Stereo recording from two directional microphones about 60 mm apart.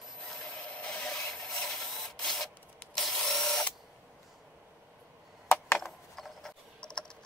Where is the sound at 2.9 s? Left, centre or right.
Centre.